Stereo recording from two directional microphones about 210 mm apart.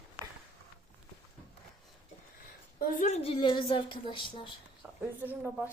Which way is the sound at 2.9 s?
35° left (ahead or behind).